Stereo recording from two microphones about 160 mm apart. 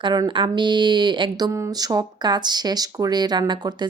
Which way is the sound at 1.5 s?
20° right (ahead or behind).